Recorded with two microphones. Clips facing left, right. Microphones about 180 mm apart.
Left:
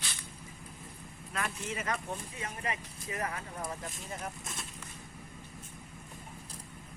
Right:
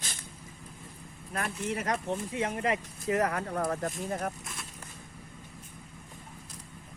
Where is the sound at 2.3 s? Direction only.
80° right; by 4.3 s 50° right (ahead or behind).